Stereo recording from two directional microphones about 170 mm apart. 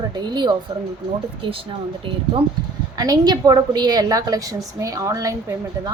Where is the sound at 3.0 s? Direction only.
25° right (ahead or behind).